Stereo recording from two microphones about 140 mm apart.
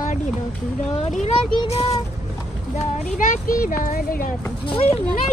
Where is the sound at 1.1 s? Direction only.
60° left (ahead or behind).